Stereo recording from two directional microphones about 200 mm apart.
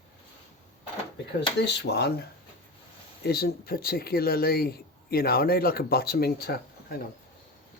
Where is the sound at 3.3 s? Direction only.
50° left (ahead or behind).